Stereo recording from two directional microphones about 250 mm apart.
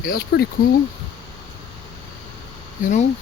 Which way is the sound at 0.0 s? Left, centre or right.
Left.